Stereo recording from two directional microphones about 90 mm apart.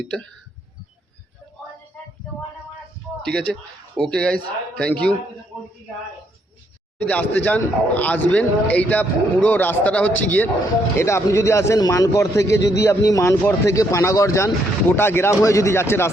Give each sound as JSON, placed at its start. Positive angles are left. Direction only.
{"t": 3.2, "sound": "speech", "side_deg": 5}
{"t": 7.1, "sound": "speech", "side_deg": 15}
{"t": 10.9, "sound": "a man's voice", "side_deg": 30}